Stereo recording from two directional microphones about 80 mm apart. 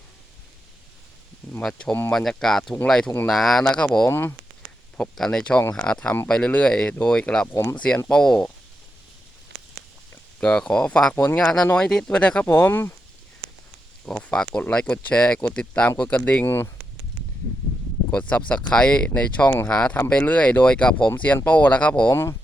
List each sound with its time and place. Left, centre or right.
2.1 s speech: centre
4.1 s speech: left
4.9 s speech: centre
7.5 s speech: left
7.8 s speech: centre
10.4 s speech: centre
11.1 s speech: left
11.3 s speech: centre
12.5 s speech: left
14.0 s speech: centre
18.1 s speech: centre